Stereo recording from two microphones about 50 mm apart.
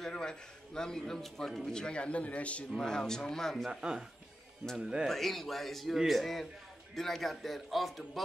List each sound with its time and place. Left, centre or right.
0.0 s a man's voice: centre
1.7 s speech: centre
2.7 s a man's voice: centre
3.5 s a man's voice: centre
5.0 s a man's voice: centre